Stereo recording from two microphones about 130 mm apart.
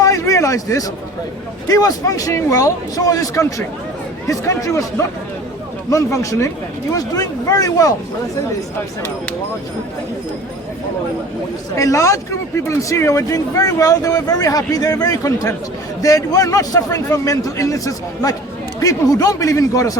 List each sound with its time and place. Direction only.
0.0 s a sound: 25° left (ahead or behind)
1.6 s speech: 30° left (ahead or behind)
11.8 s speech: 25° left (ahead or behind)